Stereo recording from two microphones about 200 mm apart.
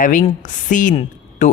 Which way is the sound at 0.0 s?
40° left (ahead or behind).